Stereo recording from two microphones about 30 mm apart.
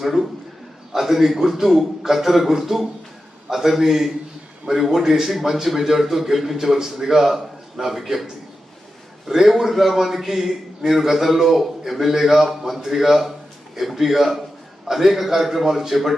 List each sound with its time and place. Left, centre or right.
0.0 s a man's voice: centre